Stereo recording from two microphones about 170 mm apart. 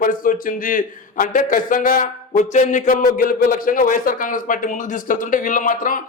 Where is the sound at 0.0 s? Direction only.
55° left (ahead or behind).